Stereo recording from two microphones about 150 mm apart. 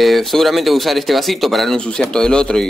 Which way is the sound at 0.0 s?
Centre (ahead or behind).